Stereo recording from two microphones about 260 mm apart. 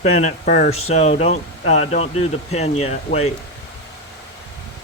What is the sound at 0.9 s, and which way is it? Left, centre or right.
Speech, left.